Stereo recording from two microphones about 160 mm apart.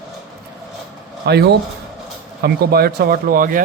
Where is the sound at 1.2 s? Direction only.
90° right.